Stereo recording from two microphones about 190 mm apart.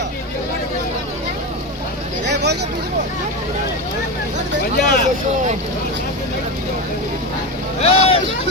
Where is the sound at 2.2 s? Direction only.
60° right (ahead or behind).